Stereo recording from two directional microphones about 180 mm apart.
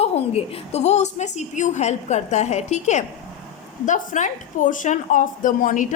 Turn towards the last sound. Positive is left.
turn(degrees=50)  # may be behind; listen again after turning